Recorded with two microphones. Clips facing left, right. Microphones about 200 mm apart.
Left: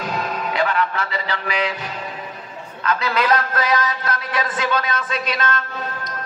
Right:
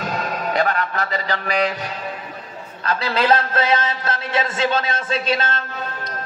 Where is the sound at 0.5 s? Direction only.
40° right (ahead or behind).